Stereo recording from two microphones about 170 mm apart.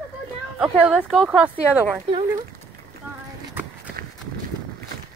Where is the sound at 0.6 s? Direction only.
5° right (ahead or behind).